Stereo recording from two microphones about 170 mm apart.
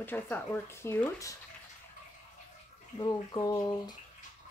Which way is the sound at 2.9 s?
25° left (ahead or behind).